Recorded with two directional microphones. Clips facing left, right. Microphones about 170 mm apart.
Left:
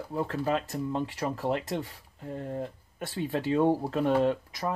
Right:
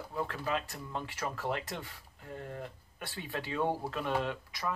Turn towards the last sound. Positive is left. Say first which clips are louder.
# left 8 dB
turn(degrees=40)  # may be behind; listen again after turning